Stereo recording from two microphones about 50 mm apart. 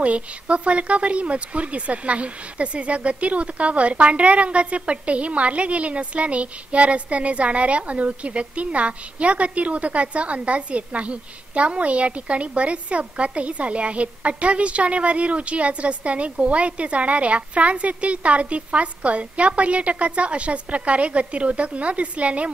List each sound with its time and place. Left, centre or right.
0.0 s speech: right